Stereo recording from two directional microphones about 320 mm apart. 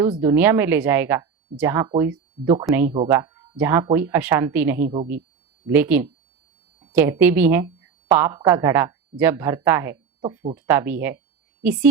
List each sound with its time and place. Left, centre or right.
0.1 s a woman's voice: centre